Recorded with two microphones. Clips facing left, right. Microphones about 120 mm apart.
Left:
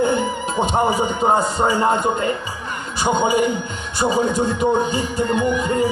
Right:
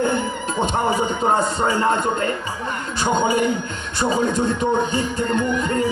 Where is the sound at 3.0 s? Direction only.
5° left (ahead or behind).